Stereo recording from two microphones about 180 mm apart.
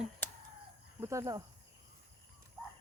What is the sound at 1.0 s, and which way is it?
Speech, 15° right (ahead or behind).